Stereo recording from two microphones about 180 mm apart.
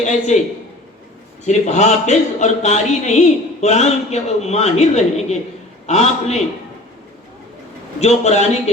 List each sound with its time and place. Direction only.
0.0 s a man's voice: 40° left (ahead or behind)
1.5 s a man's voice: 40° left (ahead or behind)
7.9 s a man's voice: 35° left (ahead or behind)